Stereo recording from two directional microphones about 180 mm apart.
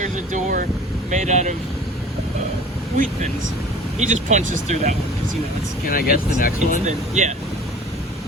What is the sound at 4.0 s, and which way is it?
Speech, 40° right (ahead or behind).